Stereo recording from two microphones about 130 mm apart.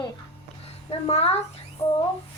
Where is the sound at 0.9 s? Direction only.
50° left (ahead or behind).